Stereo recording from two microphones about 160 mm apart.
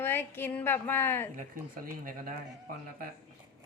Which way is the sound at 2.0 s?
60° right (ahead or behind).